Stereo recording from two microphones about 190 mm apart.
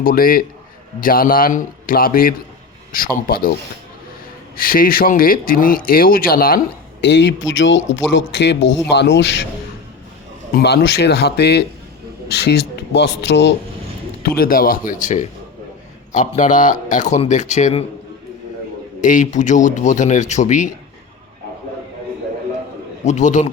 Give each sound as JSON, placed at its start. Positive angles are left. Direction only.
{"t": 0.0, "sound": "speech", "side_deg": 50}
{"t": 4.5, "sound": "speech", "side_deg": 50}
{"t": 7.0, "sound": "speech", "side_deg": 65}
{"t": 10.5, "sound": "speech", "side_deg": 60}
{"t": 14.2, "sound": "a man's voice", "side_deg": 50}
{"t": 19.0, "sound": "a man's voice", "side_deg": 40}
{"t": 23.0, "sound": "a man's voice", "side_deg": 40}